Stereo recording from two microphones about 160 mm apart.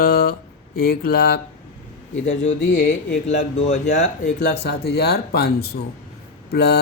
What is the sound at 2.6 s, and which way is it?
Speech, 90° left.